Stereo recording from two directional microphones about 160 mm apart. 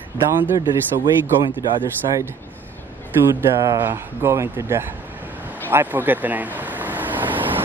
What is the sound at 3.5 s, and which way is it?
Speech, 20° right (ahead or behind).